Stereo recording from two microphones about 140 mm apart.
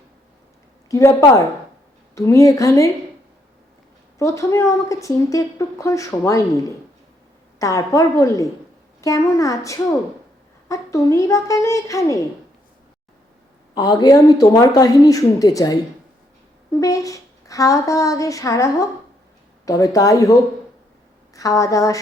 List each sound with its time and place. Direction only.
0.9 s a woman's voice: 20° left (ahead or behind)
2.1 s a woman's voice: 20° left (ahead or behind)
4.2 s a woman's voice: 20° left (ahead or behind)
13.7 s a woman's voice: 30° left (ahead or behind)
16.8 s a woman's voice: 25° left (ahead or behind)
21.3 s a woman's voice: 25° left (ahead or behind)